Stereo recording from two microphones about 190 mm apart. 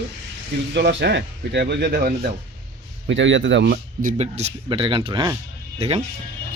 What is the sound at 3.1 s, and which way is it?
Speech, 75° right (ahead or behind).